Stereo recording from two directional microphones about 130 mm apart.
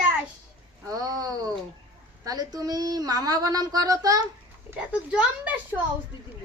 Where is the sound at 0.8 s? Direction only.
25° right (ahead or behind).